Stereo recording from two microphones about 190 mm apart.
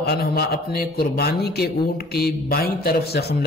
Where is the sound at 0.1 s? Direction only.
55° left (ahead or behind).